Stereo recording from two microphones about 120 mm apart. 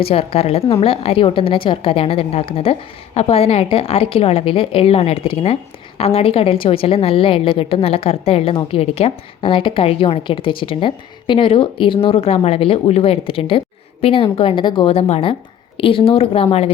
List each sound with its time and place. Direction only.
0.0 s a woman's voice: 55° left (ahead or behind)
14.9 s a woman's voice: 60° left (ahead or behind)